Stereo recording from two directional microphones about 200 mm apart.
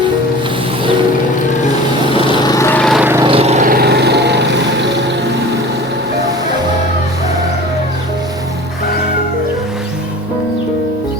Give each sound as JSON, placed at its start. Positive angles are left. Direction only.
{"t": 2.4, "sound": "vehicle", "side_deg": 15}
{"t": 3.0, "sound": "vehicle", "side_deg": -10}
{"t": 3.2, "sound": "vehicle", "side_deg": -30}